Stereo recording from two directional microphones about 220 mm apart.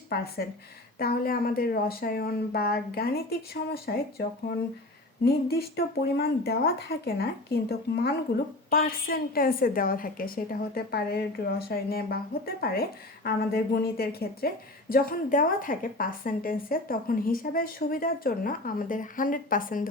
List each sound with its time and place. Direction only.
0.9 s a woman's voice: 40° left (ahead or behind)